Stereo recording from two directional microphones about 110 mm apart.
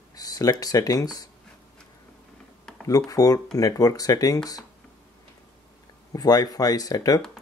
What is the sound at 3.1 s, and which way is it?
Speech, 35° left (ahead or behind).